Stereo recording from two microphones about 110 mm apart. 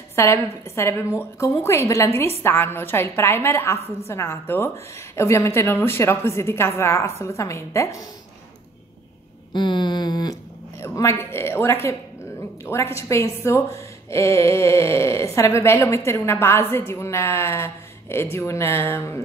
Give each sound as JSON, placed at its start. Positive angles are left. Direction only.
{"t": 0.1, "sound": "a woman's voice", "side_deg": 25}
{"t": 9.5, "sound": "a sound", "side_deg": 45}
{"t": 10.8, "sound": "a woman's voice", "side_deg": 25}